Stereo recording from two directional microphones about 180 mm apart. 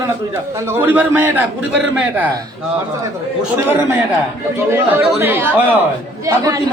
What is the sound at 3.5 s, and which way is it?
Speech, 10° right (ahead or behind).